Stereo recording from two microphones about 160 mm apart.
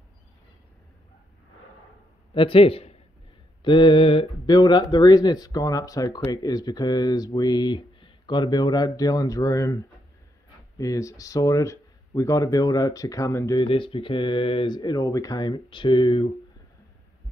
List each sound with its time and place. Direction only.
2.3 s a man's voice: 35° left (ahead or behind)
13.7 s speech: 35° left (ahead or behind)